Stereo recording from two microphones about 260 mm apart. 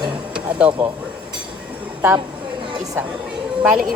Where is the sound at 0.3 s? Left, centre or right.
Centre.